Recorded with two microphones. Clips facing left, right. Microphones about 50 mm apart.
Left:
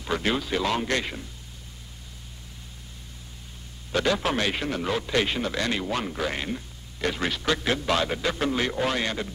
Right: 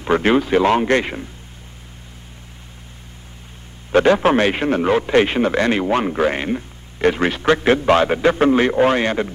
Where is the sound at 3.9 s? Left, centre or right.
Right.